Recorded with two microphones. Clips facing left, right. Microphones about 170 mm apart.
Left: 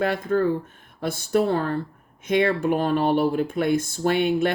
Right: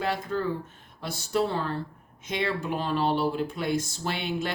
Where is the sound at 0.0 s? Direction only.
55° left (ahead or behind).